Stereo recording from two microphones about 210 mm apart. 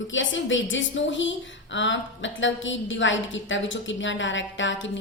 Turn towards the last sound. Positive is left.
turn(degrees=60)  # may be behind; listen again after turning